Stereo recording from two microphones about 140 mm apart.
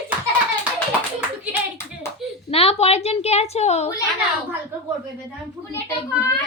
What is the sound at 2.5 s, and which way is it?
A woman's voice, 45° left (ahead or behind).